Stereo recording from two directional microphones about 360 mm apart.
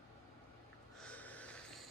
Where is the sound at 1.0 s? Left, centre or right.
Centre.